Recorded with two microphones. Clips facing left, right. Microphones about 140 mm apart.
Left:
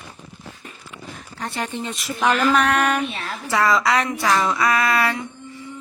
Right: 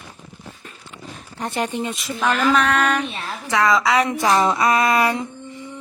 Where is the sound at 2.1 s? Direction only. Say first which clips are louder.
Even; 15° left (ahead or behind).